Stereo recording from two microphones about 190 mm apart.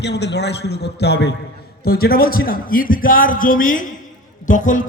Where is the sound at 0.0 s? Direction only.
65° left (ahead or behind).